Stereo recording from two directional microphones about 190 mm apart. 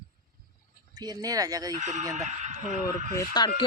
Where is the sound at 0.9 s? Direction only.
20° right (ahead or behind).